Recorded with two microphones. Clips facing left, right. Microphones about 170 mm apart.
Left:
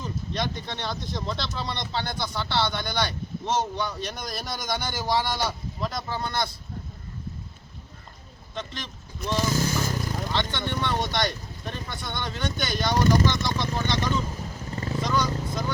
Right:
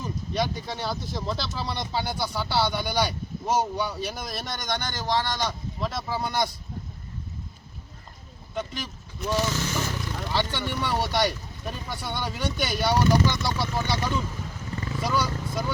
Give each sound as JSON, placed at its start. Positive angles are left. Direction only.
{"t": 0.0, "sound": "speech", "side_deg": -10}
{"t": 5.9, "sound": "speech", "side_deg": -5}
{"t": 8.5, "sound": "speech", "side_deg": -10}
{"t": 9.5, "sound": "vehicle", "side_deg": 40}
{"t": 10.3, "sound": "speech", "side_deg": -10}
{"t": 14.8, "sound": "vehicle", "side_deg": 35}
{"t": 15.0, "sound": "vehicle", "side_deg": -5}